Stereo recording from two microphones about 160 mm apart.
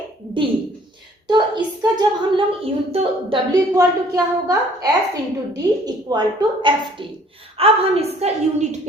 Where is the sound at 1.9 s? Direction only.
35° right (ahead or behind).